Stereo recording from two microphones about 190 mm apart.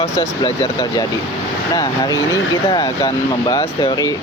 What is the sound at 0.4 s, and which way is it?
Speech, 20° left (ahead or behind).